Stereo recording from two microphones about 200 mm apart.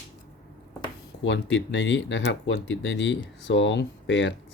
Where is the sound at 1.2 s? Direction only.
65° left (ahead or behind).